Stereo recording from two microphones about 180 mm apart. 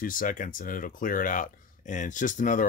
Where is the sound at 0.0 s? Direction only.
50° left (ahead or behind).